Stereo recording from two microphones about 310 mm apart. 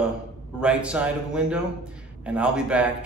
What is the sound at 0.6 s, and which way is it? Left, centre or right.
A man's voice, centre.